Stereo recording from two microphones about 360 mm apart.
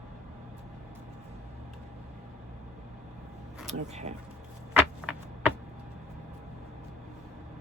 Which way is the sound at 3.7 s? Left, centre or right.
Centre.